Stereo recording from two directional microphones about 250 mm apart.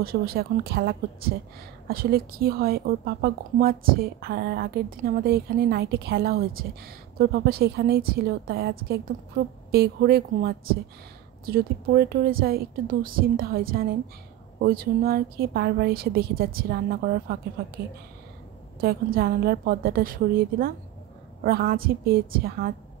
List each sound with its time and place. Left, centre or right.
0.0 s a woman's voice: right
18.8 s a woman's voice: right